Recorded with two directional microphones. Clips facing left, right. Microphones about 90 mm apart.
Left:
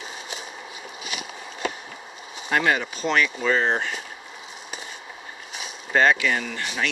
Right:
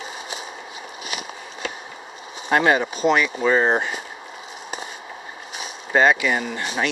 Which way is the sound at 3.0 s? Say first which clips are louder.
Right 4 dB; 15° right (ahead or behind).